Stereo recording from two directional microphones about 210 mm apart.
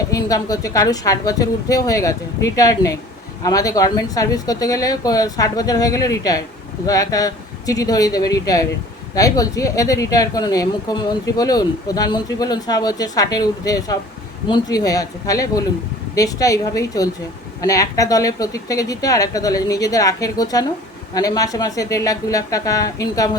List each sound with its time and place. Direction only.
0.1 s speech: 15° left (ahead or behind)